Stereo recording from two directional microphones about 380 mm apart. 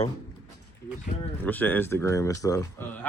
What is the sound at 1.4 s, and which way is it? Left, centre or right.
Speech, centre.